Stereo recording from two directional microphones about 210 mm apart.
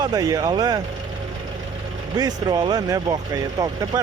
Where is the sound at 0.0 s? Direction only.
20° right (ahead or behind).